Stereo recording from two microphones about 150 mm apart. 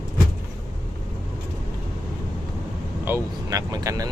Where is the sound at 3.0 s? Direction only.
20° right (ahead or behind).